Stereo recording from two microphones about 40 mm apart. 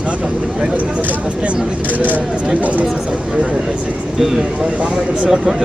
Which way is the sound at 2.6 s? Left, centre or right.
Right.